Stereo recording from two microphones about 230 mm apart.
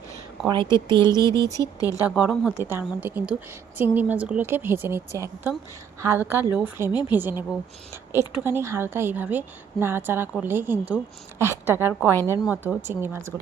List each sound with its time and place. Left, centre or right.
0.4 s speech: right
1.3 s speech: centre
2.0 s a woman's voice: centre